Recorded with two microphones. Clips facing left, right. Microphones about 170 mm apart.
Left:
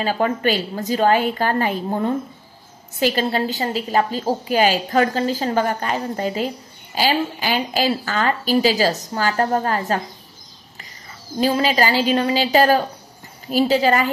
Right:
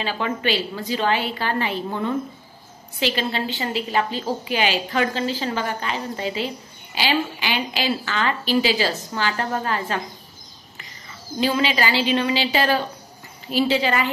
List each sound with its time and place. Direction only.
0.0 s a woman's voice: 45° left (ahead or behind)
11.3 s a woman's voice: 40° left (ahead or behind)